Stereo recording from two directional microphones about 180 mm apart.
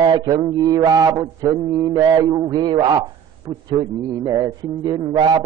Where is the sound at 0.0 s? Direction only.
25° right (ahead or behind).